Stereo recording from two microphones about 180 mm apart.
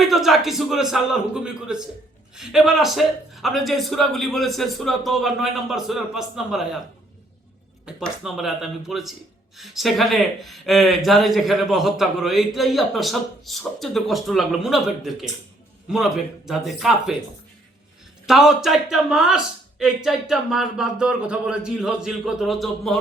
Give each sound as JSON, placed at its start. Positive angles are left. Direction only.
{"t": 0.0, "sound": "speech", "side_deg": 0}
{"t": 7.9, "sound": "speech", "side_deg": 0}
{"t": 18.3, "sound": "speech", "side_deg": 0}